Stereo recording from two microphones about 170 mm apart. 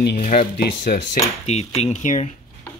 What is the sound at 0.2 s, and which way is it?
Speech, 50° left (ahead or behind).